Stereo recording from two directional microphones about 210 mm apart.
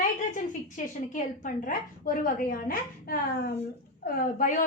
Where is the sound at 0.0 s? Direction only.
40° left (ahead or behind).